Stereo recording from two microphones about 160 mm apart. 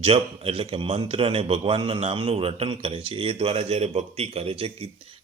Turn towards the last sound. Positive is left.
turn(degrees=-35)  # may be behind; listen again after turning